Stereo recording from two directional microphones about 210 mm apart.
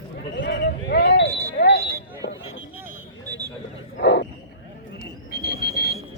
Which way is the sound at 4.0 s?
55° left (ahead or behind).